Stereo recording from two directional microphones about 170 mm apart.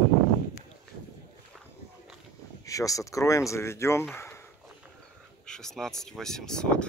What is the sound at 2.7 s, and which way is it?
Speech, 20° left (ahead or behind).